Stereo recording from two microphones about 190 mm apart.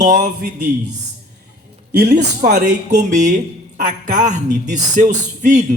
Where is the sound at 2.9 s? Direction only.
40° right (ahead or behind).